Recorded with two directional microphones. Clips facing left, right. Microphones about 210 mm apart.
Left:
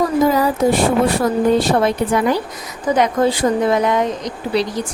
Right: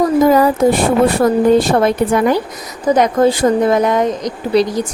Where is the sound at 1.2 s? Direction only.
50° right (ahead or behind).